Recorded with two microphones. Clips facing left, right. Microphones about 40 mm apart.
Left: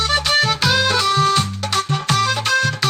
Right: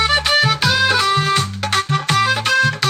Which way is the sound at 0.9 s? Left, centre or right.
Centre.